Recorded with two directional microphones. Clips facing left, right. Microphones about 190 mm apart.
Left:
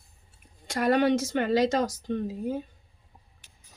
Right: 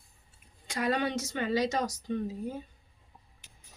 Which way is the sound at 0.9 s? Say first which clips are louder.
Left 8 dB; 65° left (ahead or behind).